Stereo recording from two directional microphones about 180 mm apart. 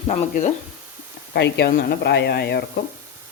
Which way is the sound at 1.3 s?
70° left (ahead or behind).